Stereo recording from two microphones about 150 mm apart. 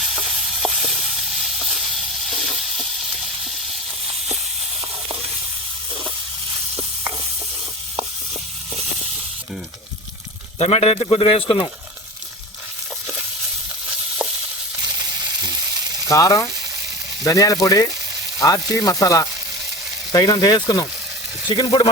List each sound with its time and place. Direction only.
0.0 s hiss: centre (ahead or behind)
10.6 s speech: 45° left (ahead or behind)
16.0 s speech: 25° left (ahead or behind)